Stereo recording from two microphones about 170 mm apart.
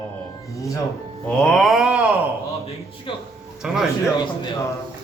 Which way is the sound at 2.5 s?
35° left (ahead or behind).